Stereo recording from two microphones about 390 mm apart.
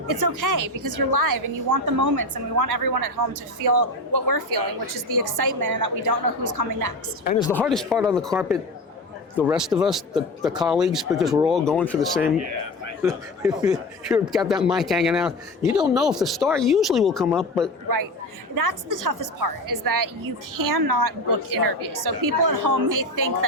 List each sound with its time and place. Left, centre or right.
0.1 s a woman's voice: right
7.3 s speech: centre
7.6 s a man's voice: centre
18.5 s a woman's voice: right